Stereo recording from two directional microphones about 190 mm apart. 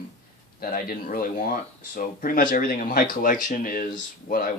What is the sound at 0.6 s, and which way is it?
Speech, 45° left (ahead or behind).